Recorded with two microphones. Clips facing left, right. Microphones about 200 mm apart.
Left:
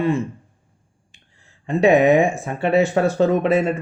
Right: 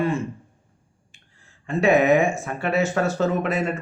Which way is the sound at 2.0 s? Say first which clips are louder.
Left 3 dB; 35° left (ahead or behind).